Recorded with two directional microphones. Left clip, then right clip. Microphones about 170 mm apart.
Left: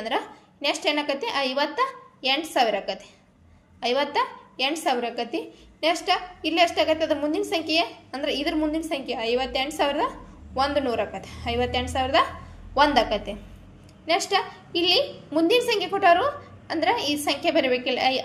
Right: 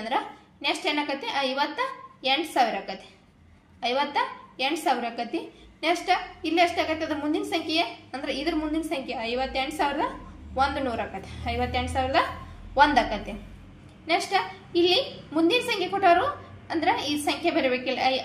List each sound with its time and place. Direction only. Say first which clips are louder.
0.0 s a woman's voice: left 1 dB; 45° left (ahead or behind)